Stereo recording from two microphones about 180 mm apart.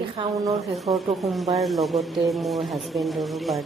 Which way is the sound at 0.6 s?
Centre (ahead or behind).